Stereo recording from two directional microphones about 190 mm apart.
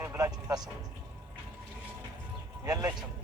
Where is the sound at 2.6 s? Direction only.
15° right (ahead or behind).